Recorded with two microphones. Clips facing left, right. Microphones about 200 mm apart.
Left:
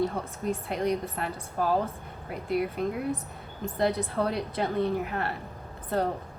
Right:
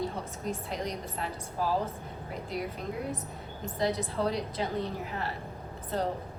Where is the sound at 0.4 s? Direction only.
60° left (ahead or behind).